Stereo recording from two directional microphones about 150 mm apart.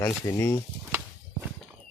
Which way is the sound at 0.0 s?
15° left (ahead or behind).